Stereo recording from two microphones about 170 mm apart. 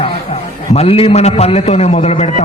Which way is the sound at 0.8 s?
35° left (ahead or behind).